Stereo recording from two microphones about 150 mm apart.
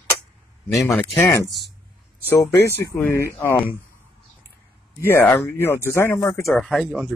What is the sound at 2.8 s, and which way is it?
Speech, 15° left (ahead or behind).